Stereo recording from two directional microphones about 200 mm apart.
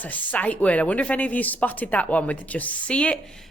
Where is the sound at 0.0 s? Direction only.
10° left (ahead or behind).